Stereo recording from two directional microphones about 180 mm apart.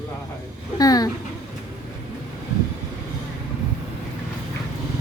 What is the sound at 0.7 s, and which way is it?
Speech, 20° left (ahead or behind).